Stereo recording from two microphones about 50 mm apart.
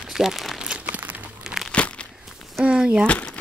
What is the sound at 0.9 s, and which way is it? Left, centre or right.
Crumpling, right.